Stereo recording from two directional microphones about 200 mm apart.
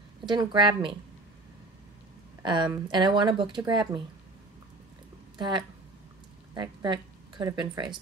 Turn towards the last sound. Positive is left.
turn(degrees=-20)  # may be behind; listen again after turning